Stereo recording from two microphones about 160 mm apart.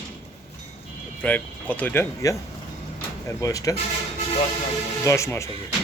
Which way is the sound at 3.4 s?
20° left (ahead or behind).